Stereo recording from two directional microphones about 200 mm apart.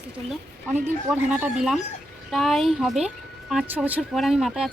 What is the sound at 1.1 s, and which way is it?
Speech, 5° right (ahead or behind).